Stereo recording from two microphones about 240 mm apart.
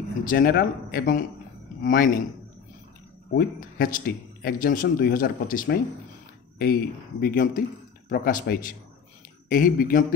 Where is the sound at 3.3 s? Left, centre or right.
Left.